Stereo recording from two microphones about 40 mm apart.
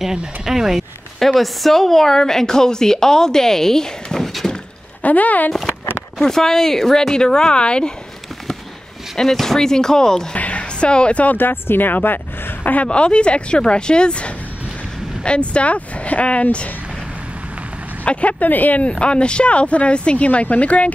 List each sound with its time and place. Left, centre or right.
0.5 s speech: centre
1.2 s a woman's voice: centre
5.0 s speech: left
6.1 s a woman's voice: centre
9.1 s a woman's voice: centre
10.3 s music: left
11.3 s speech: left
12.8 s speech: left
18.0 s speech: left
18.5 s speech: left
18.8 s speech: left